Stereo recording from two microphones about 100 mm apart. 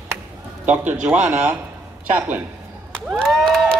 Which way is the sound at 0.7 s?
15° right (ahead or behind).